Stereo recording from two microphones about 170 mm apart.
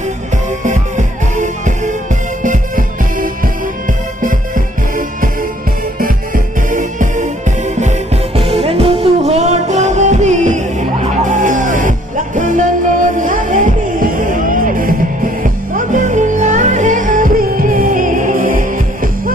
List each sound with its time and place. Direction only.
0.7 s music: 45° right (ahead or behind)
8.4 s music: 35° right (ahead or behind); by 18.7 s 50° right (ahead or behind)